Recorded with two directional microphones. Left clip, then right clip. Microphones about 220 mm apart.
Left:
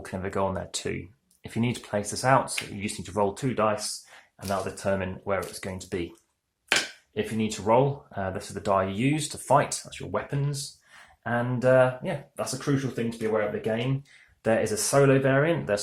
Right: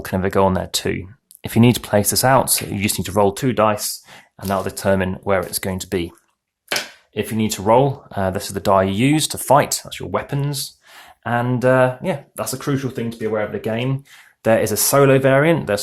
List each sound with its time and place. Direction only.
0.0 s speech: 35° right (ahead or behind)
7.1 s speech: 40° right (ahead or behind)